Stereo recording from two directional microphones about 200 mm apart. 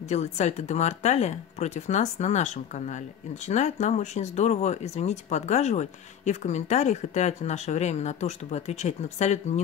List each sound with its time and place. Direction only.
0.0 s speech: 35° left (ahead or behind)